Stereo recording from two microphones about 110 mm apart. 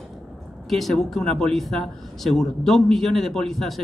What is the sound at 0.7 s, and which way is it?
Speech, centre (ahead or behind).